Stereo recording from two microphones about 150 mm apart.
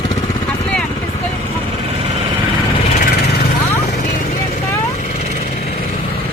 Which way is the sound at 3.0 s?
90° left.